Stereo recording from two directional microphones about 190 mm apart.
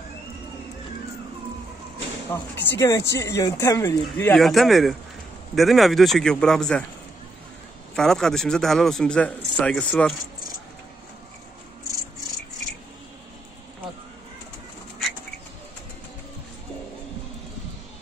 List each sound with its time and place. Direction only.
2.2 s speech: 10° left (ahead or behind)
4.4 s a man's voice: centre (ahead or behind)
7.9 s a man's voice: centre (ahead or behind)